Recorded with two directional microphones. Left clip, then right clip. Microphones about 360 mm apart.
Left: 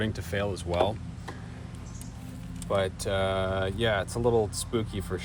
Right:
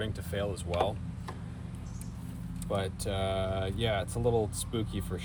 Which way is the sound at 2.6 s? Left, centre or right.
Centre.